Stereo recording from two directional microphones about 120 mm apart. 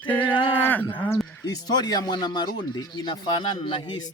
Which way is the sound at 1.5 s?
35° left (ahead or behind).